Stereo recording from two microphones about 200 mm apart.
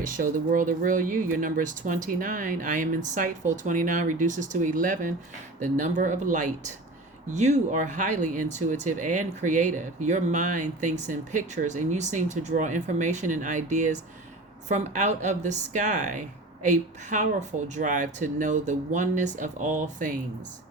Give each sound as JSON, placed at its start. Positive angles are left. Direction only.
{"t": 0.0, "sound": "speech", "side_deg": -40}